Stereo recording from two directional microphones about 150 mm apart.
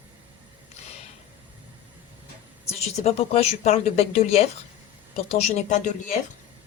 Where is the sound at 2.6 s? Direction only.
45° left (ahead or behind).